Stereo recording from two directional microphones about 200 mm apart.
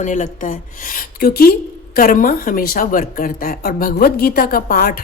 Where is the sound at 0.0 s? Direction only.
40° left (ahead or behind).